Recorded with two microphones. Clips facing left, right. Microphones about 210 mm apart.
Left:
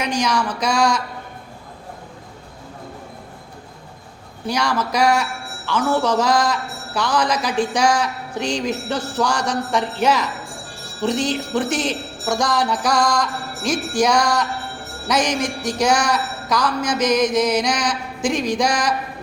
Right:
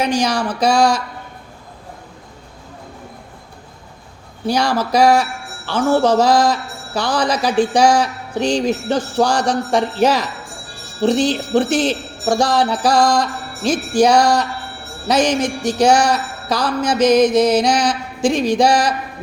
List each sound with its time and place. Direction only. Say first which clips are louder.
0.0 s a woman's voice: right 3 dB; 30° right (ahead or behind)
4.4 s a woman's voice: right 4 dB; 30° right (ahead or behind)
15.0 s music: right 4 dB; 30° right (ahead or behind)